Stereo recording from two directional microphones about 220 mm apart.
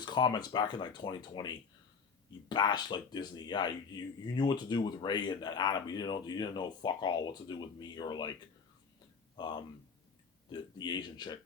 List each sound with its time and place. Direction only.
0.0 s speech: 20° left (ahead or behind)
9.4 s speech: 20° left (ahead or behind)